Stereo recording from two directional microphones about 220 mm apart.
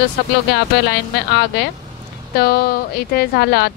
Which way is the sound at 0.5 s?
50° left (ahead or behind).